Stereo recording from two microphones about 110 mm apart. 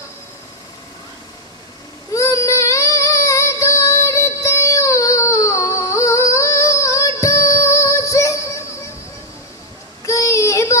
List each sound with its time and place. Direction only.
2.1 s child singing: 30° left (ahead or behind)
10.0 s child singing: 30° left (ahead or behind)